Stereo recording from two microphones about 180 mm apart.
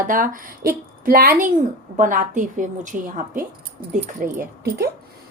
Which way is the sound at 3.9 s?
50° right (ahead or behind).